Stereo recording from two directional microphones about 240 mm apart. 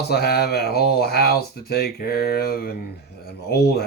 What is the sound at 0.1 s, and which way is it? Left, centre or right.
Speech, left.